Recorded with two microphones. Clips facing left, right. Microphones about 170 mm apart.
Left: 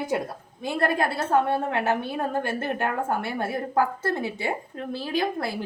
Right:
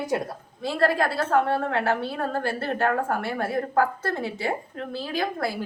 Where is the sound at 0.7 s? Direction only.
20° left (ahead or behind).